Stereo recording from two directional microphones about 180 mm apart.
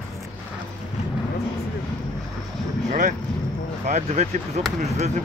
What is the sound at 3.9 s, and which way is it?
Speech, 40° right (ahead or behind).